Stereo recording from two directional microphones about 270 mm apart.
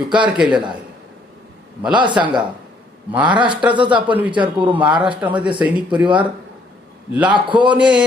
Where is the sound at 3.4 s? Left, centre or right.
Centre.